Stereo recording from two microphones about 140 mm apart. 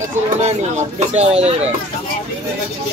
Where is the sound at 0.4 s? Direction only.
50° right (ahead or behind).